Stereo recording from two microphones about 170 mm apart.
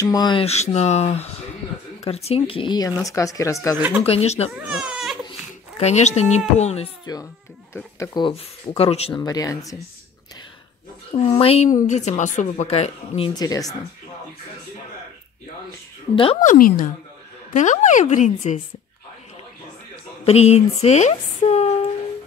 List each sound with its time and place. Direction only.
0.0 s a woman's voice: 20° left (ahead or behind)
3.7 s speech: 10° right (ahead or behind)
4.0 s a woman's voice: 35° left (ahead or behind)
4.6 s baby cry: 5° right (ahead or behind)
5.8 s a woman's voice: 40° left (ahead or behind)
7.7 s a woman's voice: 20° left (ahead or behind)
9.2 s speech: 20° left (ahead or behind)
11.2 s a woman's voice: 35° left (ahead or behind)
13.3 s speech: 20° left (ahead or behind)
16.3 s a woman's voice: 50° left (ahead or behind)
20.2 s a woman's voice: 40° left (ahead or behind)